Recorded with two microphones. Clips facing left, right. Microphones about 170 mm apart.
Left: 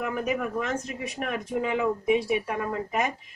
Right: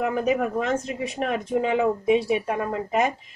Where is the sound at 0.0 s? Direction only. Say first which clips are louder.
Right 5 dB; 30° right (ahead or behind).